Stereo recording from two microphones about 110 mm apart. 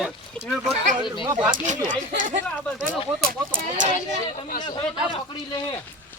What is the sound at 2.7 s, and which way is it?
Speech, 10° left (ahead or behind).